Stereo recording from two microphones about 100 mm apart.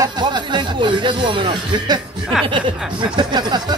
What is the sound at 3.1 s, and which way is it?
Speech, 45° right (ahead or behind).